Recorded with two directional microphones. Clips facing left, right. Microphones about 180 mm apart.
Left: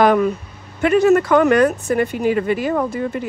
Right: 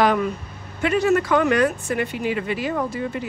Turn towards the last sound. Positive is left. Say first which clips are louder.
# left 4 dB
turn(degrees=50)  # may be behind; listen again after turning